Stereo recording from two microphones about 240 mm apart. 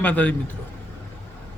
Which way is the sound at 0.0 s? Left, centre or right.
Centre.